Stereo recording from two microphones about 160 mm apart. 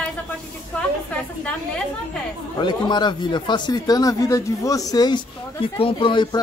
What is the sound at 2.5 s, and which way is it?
Speech, 30° left (ahead or behind).